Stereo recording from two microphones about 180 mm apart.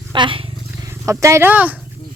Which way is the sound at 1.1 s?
15° right (ahead or behind).